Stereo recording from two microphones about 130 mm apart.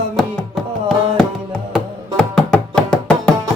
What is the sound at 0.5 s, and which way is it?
Music, centre (ahead or behind).